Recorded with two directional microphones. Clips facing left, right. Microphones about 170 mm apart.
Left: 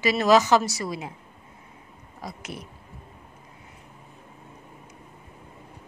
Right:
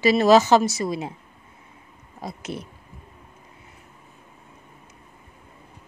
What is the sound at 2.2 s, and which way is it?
Speech, 25° right (ahead or behind).